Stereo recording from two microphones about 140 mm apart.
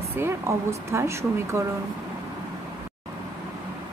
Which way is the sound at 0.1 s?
20° right (ahead or behind).